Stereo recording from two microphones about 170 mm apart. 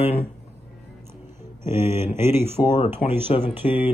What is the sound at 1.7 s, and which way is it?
Speech, 15° right (ahead or behind).